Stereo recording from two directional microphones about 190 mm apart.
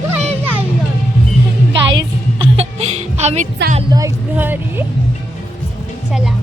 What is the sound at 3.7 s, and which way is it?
Speech, 30° right (ahead or behind).